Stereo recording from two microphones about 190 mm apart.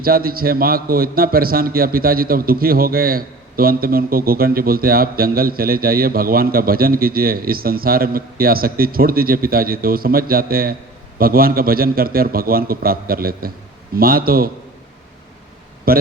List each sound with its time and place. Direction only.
0.0 s a man's voice: 50° right (ahead or behind)
15.9 s a man's voice: 50° right (ahead or behind)